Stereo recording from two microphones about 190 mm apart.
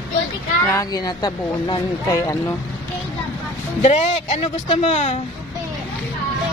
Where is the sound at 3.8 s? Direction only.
35° left (ahead or behind).